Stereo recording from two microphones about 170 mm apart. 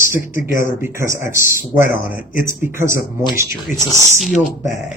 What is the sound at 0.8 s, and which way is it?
A woman's voice, 15° right (ahead or behind).